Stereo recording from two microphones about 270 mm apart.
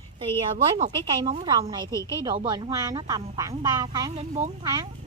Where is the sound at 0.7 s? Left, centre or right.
Centre.